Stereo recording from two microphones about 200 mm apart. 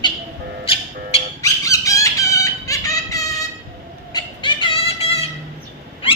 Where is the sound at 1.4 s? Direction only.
15° left (ahead or behind).